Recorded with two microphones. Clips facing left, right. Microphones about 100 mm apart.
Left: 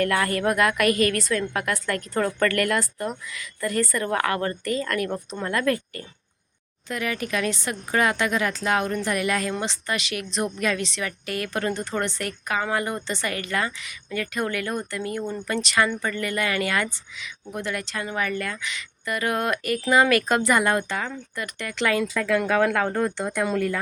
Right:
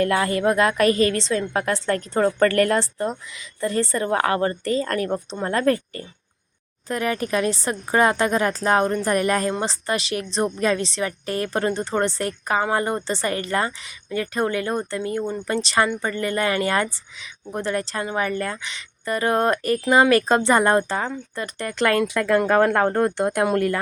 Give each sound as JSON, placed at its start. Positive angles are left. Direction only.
{"t": 0.0, "sound": "a woman's voice", "side_deg": -25}
{"t": 21.8, "sound": "speech", "side_deg": -60}
{"t": 22.3, "sound": "speech", "side_deg": -45}